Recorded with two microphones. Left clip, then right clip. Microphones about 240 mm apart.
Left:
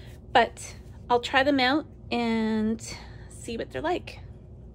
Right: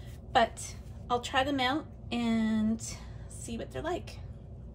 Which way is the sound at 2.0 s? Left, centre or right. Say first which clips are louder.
Left 2 dB; left.